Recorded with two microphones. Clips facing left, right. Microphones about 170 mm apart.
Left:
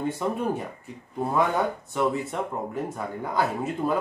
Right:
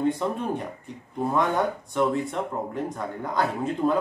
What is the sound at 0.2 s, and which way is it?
Speech, 5° left (ahead or behind).